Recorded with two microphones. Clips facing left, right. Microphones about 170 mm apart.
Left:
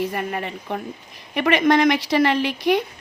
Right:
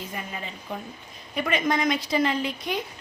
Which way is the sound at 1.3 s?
75° left (ahead or behind).